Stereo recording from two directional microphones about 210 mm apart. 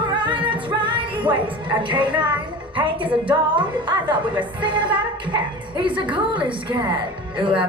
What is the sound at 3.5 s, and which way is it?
A woman's voice, 20° right (ahead or behind).